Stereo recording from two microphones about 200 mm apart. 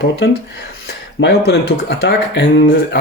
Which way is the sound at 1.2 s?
55° left (ahead or behind).